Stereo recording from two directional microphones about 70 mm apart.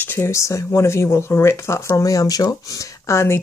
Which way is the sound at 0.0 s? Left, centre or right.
Left.